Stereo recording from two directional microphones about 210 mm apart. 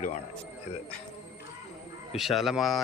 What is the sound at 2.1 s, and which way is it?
Speech, centre (ahead or behind).